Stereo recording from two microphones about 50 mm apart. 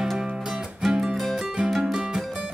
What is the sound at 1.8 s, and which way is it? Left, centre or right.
Music, centre.